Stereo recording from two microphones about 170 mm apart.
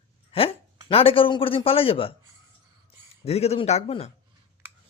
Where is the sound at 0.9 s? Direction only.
35° left (ahead or behind).